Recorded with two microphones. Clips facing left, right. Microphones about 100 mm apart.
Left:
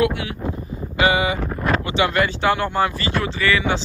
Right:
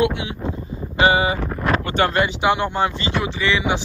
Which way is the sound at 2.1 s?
20° right (ahead or behind).